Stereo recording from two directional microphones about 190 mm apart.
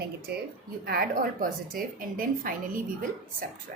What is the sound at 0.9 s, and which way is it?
A woman's voice, 50° right (ahead or behind).